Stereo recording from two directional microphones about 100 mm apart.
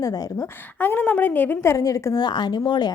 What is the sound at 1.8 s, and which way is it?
A woman's voice, 35° left (ahead or behind).